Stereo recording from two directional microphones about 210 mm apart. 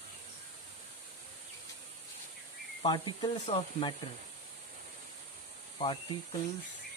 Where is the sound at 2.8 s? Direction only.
20° left (ahead or behind).